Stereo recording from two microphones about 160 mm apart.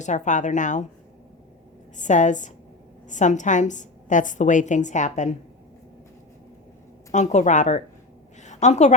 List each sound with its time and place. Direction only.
0.0 s a woman's voice: 50° left (ahead or behind)
2.0 s a woman's voice: 50° left (ahead or behind)
7.1 s a woman's voice: 45° left (ahead or behind)
8.4 s a sound: 45° left (ahead or behind)